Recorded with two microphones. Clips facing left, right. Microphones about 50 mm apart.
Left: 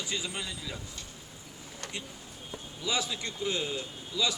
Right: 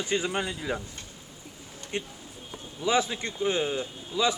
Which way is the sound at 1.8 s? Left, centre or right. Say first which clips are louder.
Right 7 dB; left.